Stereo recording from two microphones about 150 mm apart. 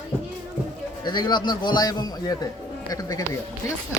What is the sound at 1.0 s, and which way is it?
A man's voice, 30° left (ahead or behind).